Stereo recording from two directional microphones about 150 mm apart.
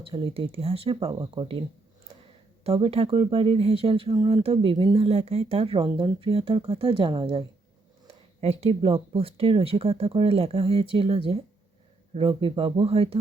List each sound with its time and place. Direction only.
0.0 s speech: 35° right (ahead or behind)
2.6 s speech: 40° right (ahead or behind)